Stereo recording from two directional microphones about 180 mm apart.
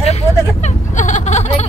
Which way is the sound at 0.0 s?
40° left (ahead or behind).